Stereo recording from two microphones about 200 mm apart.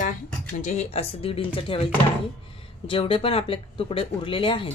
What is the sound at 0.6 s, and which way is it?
Speech, 35° left (ahead or behind).